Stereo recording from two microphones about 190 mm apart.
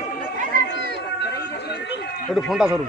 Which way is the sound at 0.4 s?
55° right (ahead or behind).